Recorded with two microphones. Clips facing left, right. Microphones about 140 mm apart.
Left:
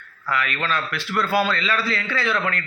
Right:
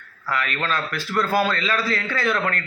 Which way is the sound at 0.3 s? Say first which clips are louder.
Even; 40° right (ahead or behind).